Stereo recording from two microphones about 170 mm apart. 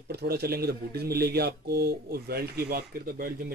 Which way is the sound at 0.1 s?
70° right (ahead or behind).